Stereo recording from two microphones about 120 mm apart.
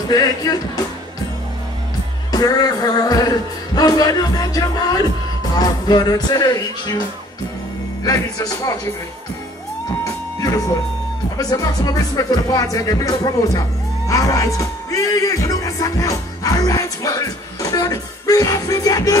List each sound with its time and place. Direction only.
0.1 s music: 30° left (ahead or behind)
2.3 s music: 30° left (ahead or behind)
11.3 s speech: 30° left (ahead or behind)